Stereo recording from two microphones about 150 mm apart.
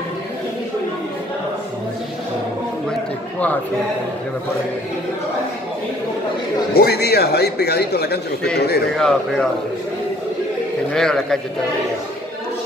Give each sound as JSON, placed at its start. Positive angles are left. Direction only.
{"t": 6.7, "sound": "speech", "side_deg": 90}
{"t": 8.9, "sound": "speech", "side_deg": 5}
{"t": 10.9, "sound": "speech", "side_deg": 5}